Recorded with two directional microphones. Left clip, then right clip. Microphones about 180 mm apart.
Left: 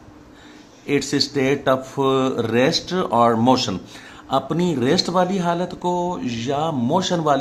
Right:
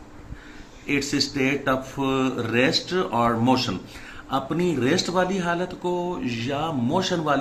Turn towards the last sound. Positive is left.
turn(degrees=60)  # may be behind; listen again after turning